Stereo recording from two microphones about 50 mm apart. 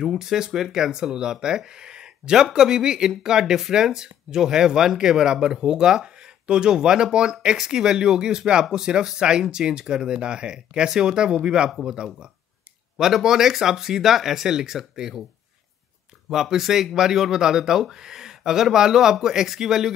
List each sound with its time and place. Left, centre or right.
0.0 s speech: centre
16.3 s speech: centre